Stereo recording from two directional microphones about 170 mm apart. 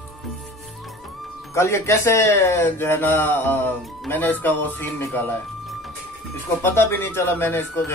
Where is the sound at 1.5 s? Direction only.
15° left (ahead or behind).